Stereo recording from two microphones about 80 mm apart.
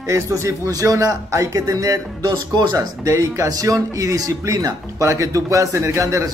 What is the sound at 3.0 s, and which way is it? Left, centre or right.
A man's voice, right.